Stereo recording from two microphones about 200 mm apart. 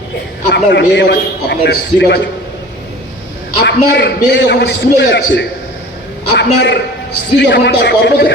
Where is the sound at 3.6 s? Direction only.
55° left (ahead or behind).